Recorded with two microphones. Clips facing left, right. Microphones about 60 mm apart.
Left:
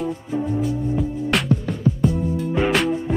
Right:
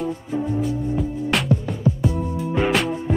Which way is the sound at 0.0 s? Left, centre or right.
Centre.